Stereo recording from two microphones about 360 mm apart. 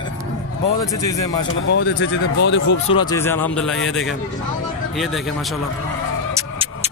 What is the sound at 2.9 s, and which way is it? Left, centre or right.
Speech, centre.